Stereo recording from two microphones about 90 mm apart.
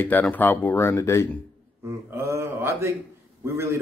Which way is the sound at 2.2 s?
30° right (ahead or behind).